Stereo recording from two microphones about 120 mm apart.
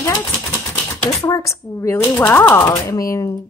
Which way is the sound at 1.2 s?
25° left (ahead or behind).